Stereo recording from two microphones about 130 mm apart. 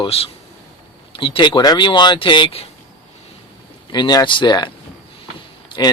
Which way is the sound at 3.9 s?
35° left (ahead or behind).